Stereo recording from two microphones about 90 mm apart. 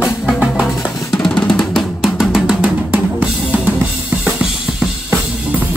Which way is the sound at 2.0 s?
5° right (ahead or behind).